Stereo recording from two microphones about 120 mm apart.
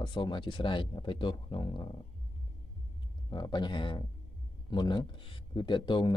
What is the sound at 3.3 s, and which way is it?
Speech, 35° left (ahead or behind).